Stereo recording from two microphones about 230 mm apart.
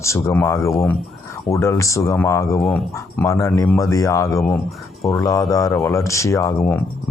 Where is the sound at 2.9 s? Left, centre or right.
Centre.